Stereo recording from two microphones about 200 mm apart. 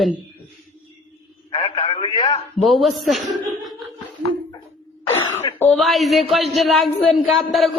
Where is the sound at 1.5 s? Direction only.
25° left (ahead or behind).